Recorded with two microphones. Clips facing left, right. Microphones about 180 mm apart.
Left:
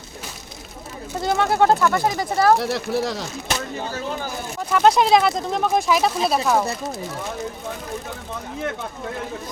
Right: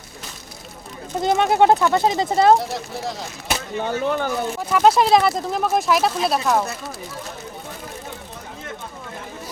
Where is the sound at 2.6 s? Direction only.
75° left (ahead or behind).